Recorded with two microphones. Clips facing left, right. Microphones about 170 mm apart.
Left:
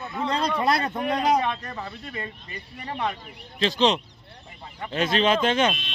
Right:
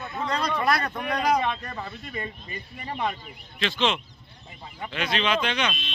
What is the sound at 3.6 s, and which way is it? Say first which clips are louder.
Speech: left 4 dB; 35° left (ahead or behind).